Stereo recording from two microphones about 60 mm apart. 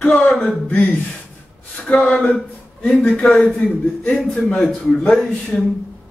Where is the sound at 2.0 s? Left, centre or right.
Centre.